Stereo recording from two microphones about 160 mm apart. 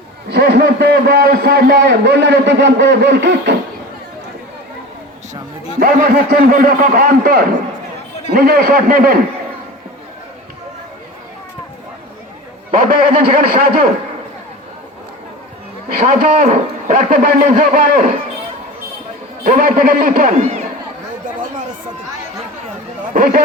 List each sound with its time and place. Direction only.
0.3 s a man's voice: 90° right
5.8 s speech: 60° right (ahead or behind)
12.7 s speech: 65° right (ahead or behind)
15.9 s speech: 60° right (ahead or behind)
19.5 s speech: 60° right (ahead or behind)
23.1 s speech: 60° right (ahead or behind)